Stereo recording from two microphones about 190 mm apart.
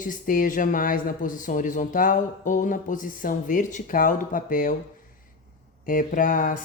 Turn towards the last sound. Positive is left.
turn(degrees=45)  # may be behind; listen again after turning